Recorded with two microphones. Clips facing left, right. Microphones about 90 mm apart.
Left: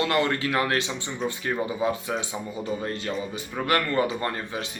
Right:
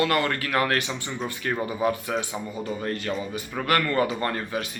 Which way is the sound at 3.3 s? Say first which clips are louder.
Even; 25° left (ahead or behind).